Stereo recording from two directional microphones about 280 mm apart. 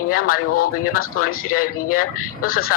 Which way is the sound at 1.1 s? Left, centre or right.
Left.